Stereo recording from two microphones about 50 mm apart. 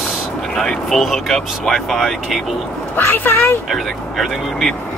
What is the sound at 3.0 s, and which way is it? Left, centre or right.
Speech, left.